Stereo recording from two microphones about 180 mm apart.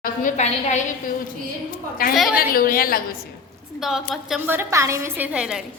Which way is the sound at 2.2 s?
Centre (ahead or behind).